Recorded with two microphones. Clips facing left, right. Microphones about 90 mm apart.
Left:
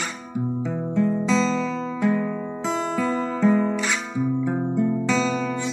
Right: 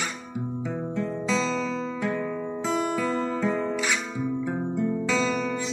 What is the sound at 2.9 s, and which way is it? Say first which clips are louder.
Music: left 2 dB; 30° left (ahead or behind).